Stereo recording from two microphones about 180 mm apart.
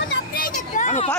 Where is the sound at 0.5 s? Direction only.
40° left (ahead or behind).